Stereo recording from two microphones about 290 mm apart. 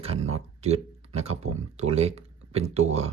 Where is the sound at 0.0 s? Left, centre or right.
Right.